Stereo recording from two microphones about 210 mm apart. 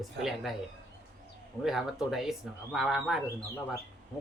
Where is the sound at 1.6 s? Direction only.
Centre (ahead or behind).